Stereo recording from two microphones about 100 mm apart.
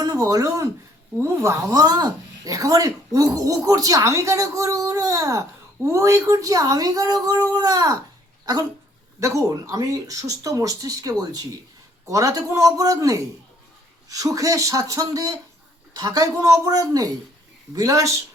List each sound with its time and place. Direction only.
0.0 s speech: 35° right (ahead or behind)
9.2 s speech: 35° right (ahead or behind)